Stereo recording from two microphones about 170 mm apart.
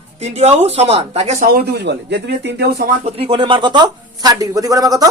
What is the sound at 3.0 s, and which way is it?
Speech, 35° right (ahead or behind).